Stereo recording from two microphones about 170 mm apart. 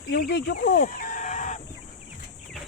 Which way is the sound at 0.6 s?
55° left (ahead or behind).